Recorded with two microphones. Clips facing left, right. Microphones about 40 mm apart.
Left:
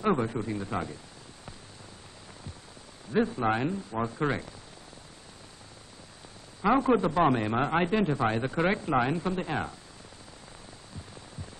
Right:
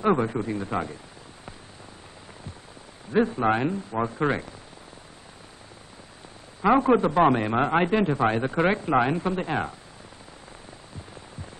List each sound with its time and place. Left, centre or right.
0.0 s a man's voice: centre
3.1 s a man's voice: centre
6.6 s a man's voice: centre